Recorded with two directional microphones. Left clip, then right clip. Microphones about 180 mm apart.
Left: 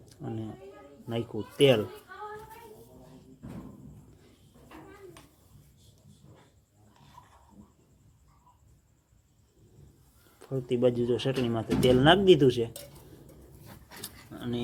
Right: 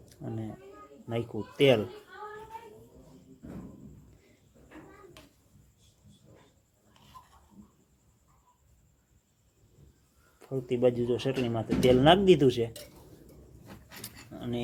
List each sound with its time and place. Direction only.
0.0 s a sound: 5° right (ahead or behind)
1.1 s speech: centre (ahead or behind)
10.4 s speech: 5° left (ahead or behind)
14.0 s dog: centre (ahead or behind)